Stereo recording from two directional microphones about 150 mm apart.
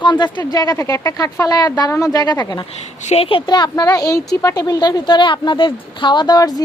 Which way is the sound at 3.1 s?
40° left (ahead or behind).